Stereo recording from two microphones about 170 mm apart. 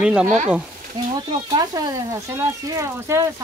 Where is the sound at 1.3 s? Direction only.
25° right (ahead or behind).